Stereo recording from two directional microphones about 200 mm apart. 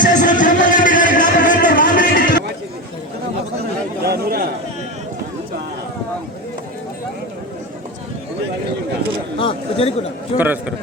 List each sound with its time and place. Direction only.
0.0 s music: 40° left (ahead or behind)
4.0 s chatter: 50° right (ahead or behind)
9.4 s a sound: 30° left (ahead or behind)
10.3 s a man's voice: 10° right (ahead or behind)